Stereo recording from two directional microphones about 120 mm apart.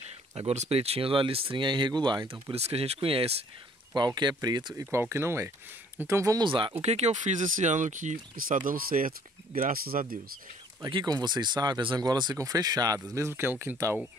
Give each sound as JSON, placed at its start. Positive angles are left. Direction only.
{"t": 0.4, "sound": "speech", "side_deg": -60}
{"t": 2.5, "sound": "speech", "side_deg": -60}
{"t": 3.9, "sound": "speech", "side_deg": -35}
{"t": 4.9, "sound": "speech", "side_deg": -20}
{"t": 6.4, "sound": "speech", "side_deg": -45}
{"t": 6.8, "sound": "speech", "side_deg": -65}
{"t": 10.9, "sound": "speech", "side_deg": -40}